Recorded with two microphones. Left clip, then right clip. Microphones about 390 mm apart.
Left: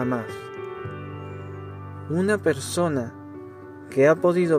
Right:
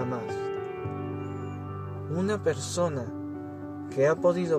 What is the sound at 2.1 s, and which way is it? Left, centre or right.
Speech, centre.